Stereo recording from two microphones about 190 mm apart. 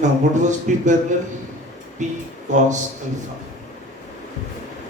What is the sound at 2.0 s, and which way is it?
Speech, 40° right (ahead or behind).